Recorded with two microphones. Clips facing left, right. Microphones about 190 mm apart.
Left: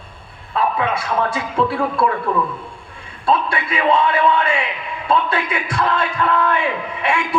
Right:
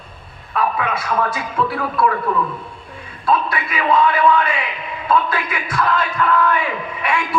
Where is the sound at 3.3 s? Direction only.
25° left (ahead or behind).